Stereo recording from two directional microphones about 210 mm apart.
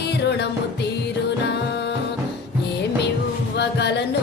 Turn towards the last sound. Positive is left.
turn(degrees=55)  # may be behind; listen again after turning